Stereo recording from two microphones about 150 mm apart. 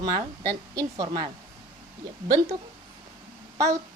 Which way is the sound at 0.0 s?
25° right (ahead or behind).